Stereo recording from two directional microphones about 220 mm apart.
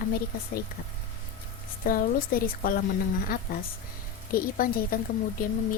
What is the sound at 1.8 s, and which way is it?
Speech, 40° left (ahead or behind).